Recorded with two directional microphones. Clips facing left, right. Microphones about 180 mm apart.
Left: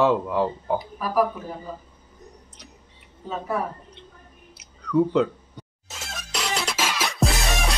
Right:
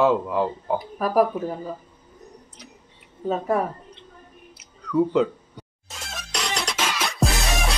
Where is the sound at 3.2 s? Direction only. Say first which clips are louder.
Right 5 dB; 45° right (ahead or behind).